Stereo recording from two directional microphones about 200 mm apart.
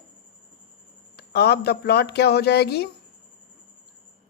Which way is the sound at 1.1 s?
55° left (ahead or behind).